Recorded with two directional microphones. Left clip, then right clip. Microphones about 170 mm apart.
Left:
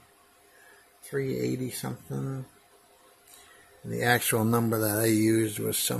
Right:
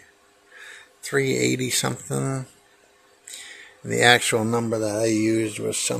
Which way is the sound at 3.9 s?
25° right (ahead or behind).